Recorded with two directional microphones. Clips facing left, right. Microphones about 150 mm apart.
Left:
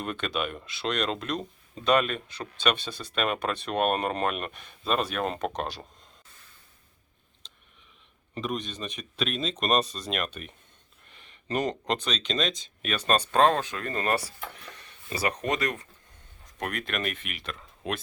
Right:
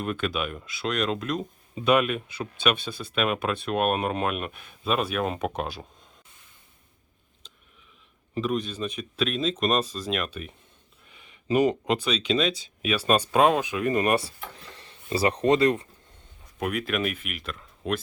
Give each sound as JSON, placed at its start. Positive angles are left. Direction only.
{"t": 0.0, "sound": "speech", "side_deg": -5}
{"t": 8.4, "sound": "speech", "side_deg": -5}
{"t": 16.6, "sound": "speech", "side_deg": -5}